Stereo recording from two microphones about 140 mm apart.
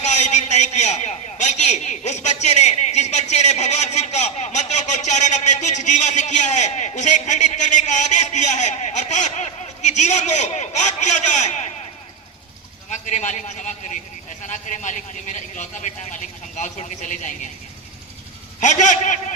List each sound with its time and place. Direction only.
0.0 s a man's voice: 55° left (ahead or behind)
12.9 s a man's voice: 60° left (ahead or behind)
18.6 s a man's voice: 60° left (ahead or behind)